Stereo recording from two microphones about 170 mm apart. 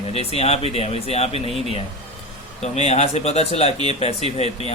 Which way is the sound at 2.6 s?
40° left (ahead or behind).